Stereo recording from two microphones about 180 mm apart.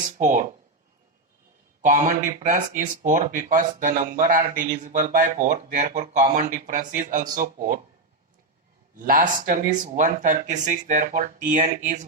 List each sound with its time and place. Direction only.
0.2 s speech: 45° right (ahead or behind)
1.8 s speech: 45° right (ahead or behind)
9.0 s speech: 50° right (ahead or behind)